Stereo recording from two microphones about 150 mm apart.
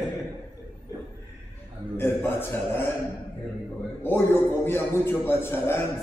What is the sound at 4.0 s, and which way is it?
A man's voice, 15° left (ahead or behind).